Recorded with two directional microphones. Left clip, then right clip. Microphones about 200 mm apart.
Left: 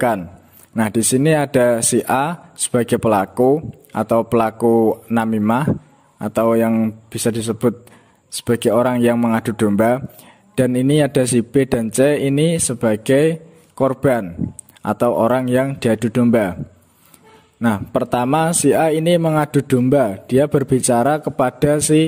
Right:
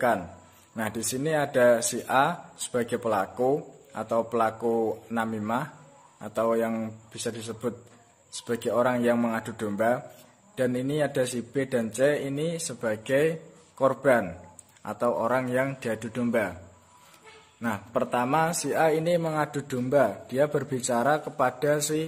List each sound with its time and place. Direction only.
0.7 s speech: 45° left (ahead or behind)
17.6 s speech: 45° left (ahead or behind)